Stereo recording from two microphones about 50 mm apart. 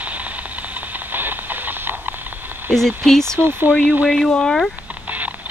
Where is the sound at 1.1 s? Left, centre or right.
Right.